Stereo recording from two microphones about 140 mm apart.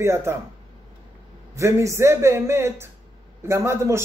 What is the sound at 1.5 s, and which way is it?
A man's voice, 20° right (ahead or behind).